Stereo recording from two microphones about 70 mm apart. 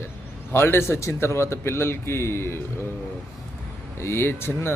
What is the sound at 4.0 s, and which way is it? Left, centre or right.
Speech, left.